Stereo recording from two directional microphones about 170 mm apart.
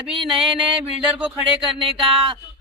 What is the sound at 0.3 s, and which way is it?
Speech, centre (ahead or behind).